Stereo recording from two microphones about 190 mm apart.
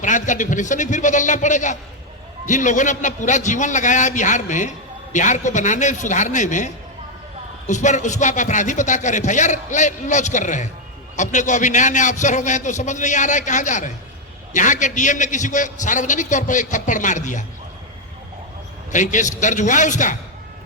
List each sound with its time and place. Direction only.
0.0 s a man's voice: 40° left (ahead or behind)
18.9 s a man's voice: 40° left (ahead or behind)